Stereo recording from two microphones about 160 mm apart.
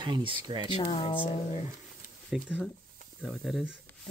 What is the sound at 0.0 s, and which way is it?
Speech, 30° right (ahead or behind).